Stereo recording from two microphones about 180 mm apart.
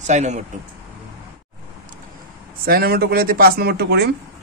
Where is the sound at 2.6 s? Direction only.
55° right (ahead or behind).